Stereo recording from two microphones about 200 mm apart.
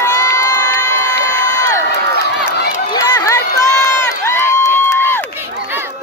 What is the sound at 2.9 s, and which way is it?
Crowd, 20° left (ahead or behind).